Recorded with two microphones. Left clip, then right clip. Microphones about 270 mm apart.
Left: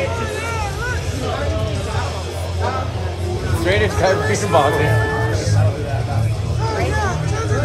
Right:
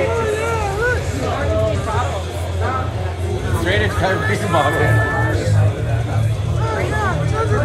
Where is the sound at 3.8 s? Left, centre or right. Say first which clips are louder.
Left 2 dB; left.